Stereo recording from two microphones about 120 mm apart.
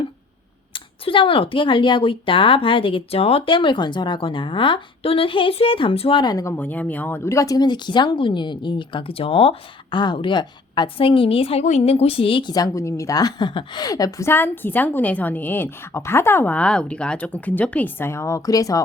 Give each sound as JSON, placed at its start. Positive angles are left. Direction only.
{"t": 0.7, "sound": "speech", "side_deg": 45}
{"t": 6.3, "sound": "speech", "side_deg": 20}
{"t": 11.6, "sound": "a woman's voice", "side_deg": 65}